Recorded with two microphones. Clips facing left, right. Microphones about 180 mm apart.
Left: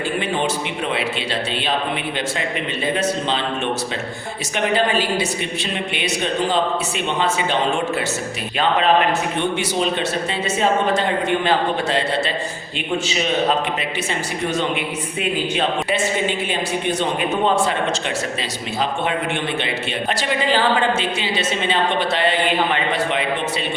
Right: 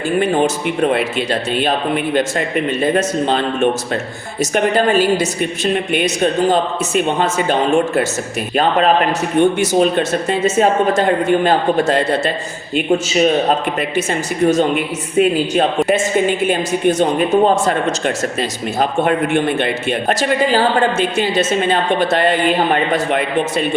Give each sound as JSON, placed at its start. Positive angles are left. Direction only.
{"t": 0.2, "sound": "a man's voice", "side_deg": -45}
{"t": 2.8, "sound": "a man's voice", "side_deg": -50}
{"t": 9.4, "sound": "a man's voice", "side_deg": -45}